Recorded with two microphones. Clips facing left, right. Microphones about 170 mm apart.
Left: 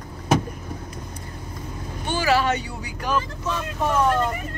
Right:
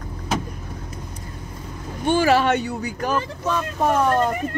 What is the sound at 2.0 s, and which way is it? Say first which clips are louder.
Speech: right 4 dB; 50° right (ahead or behind).